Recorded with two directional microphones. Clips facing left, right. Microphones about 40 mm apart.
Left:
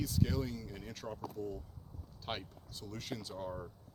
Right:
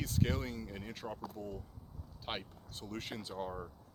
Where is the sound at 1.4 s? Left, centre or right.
Right.